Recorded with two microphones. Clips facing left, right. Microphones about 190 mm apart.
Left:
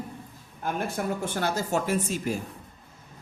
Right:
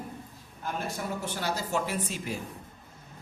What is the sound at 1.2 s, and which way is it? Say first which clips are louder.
A woman's voice: left 4 dB; 50° left (ahead or behind).